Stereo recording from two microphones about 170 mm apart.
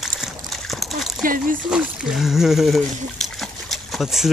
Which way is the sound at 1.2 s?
55° right (ahead or behind).